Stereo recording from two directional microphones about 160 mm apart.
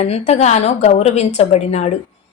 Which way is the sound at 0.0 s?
40° left (ahead or behind).